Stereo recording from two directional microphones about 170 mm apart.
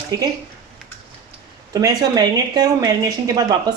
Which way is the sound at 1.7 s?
20° right (ahead or behind).